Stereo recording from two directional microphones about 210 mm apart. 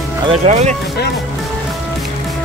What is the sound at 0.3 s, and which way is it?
Speech, 30° right (ahead or behind).